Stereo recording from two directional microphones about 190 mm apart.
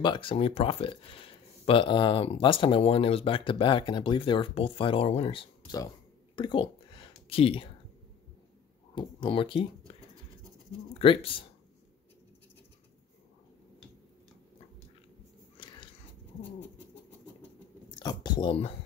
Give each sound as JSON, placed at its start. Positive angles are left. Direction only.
{"t": 0.0, "sound": "speech", "side_deg": 25}
{"t": 6.3, "sound": "a sound", "side_deg": 25}
{"t": 7.2, "sound": "speech", "side_deg": 30}
{"t": 8.9, "sound": "speech", "side_deg": 25}
{"t": 15.5, "sound": "biting", "side_deg": 25}
{"t": 17.9, "sound": "speech", "side_deg": 25}